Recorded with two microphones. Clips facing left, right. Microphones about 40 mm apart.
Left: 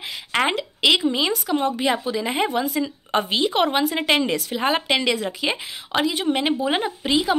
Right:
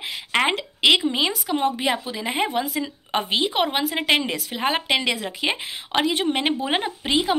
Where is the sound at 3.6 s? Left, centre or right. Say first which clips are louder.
Left 2 dB; centre.